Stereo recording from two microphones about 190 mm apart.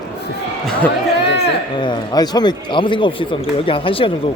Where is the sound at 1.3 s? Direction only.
65° left (ahead or behind).